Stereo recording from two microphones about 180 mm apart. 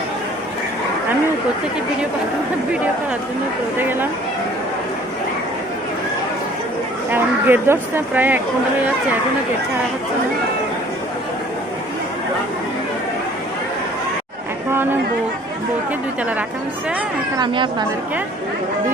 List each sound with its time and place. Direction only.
3.8 s speech: 10° right (ahead or behind)
7.1 s speech: 10° right (ahead or behind)
14.7 s chatter: 10° right (ahead or behind)
17.3 s speech: 25° right (ahead or behind)